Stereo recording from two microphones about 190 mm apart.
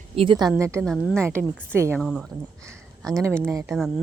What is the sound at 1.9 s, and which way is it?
Speech, centre (ahead or behind).